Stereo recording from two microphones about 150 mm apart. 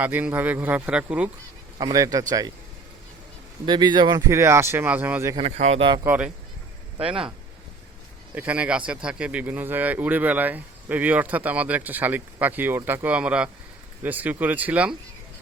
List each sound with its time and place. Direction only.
0.0 s speech: 10° right (ahead or behind)
1.8 s a man's voice: 25° right (ahead or behind)
3.7 s speech: 30° right (ahead or behind)
4.3 s speech: 20° right (ahead or behind)
5.4 s speech: 45° right (ahead or behind)
5.8 s a man's voice: 30° right (ahead or behind)
6.1 s speech: 10° right (ahead or behind)
8.4 s speech: 10° right (ahead or behind)